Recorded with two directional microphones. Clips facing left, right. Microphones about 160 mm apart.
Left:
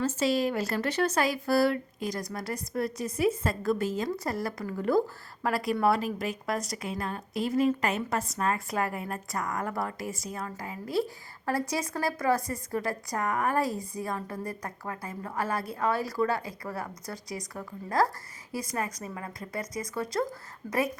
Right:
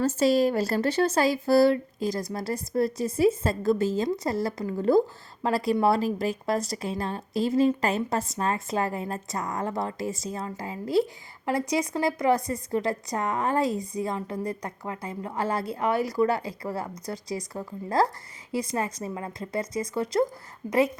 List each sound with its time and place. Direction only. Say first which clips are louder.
0.0 s a woman's voice: right 5 dB; 40° right (ahead or behind); by 21.0 s 20° right (ahead or behind)